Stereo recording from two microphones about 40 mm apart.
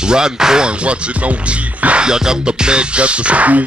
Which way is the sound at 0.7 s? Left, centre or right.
Right.